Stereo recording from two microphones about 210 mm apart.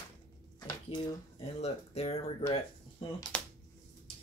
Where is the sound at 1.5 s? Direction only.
30° left (ahead or behind).